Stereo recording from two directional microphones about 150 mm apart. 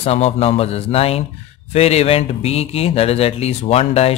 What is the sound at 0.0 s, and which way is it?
Speech, 45° left (ahead or behind).